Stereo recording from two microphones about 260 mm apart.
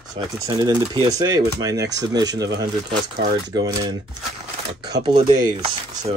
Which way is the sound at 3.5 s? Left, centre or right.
Centre.